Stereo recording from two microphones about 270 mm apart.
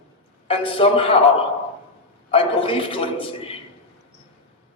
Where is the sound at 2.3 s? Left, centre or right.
Centre.